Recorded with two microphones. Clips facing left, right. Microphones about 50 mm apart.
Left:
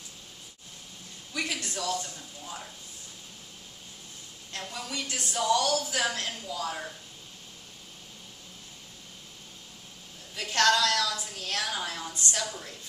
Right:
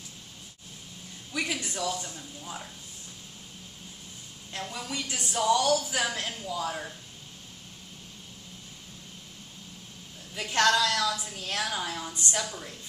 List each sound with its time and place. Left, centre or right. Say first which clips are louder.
1.3 s a man's voice: right 1 dB; centre
4.5 s a woman's voice: right 2 dB; centre
5.0 s speech: even; right
5.3 s a woman's voice: right 2 dB; centre
10.3 s a woman's voice: even; centre